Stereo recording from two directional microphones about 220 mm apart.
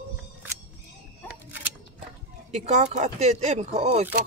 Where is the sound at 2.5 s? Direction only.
30° right (ahead or behind).